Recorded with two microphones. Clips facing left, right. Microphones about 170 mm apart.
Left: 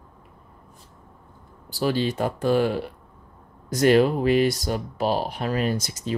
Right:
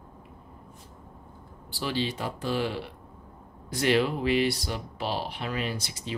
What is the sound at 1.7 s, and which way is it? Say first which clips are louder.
Speech: left 7 dB; 45° left (ahead or behind).